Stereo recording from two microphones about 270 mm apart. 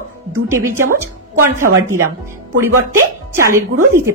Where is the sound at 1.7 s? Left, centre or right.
Right.